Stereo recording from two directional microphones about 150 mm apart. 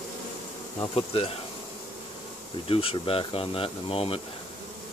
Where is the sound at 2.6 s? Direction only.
40° left (ahead or behind).